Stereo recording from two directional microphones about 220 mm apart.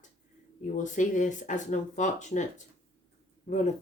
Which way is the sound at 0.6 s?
35° left (ahead or behind).